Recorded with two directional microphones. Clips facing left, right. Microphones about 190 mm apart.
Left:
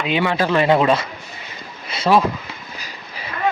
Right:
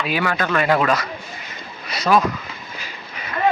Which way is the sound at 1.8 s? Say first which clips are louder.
Left 1 dB; 25° left (ahead or behind).